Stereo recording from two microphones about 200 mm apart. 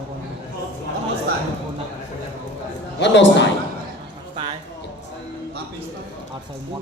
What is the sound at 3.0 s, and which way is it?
Speech, 65° left (ahead or behind).